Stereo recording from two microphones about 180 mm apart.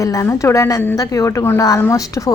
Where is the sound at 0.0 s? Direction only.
15° left (ahead or behind).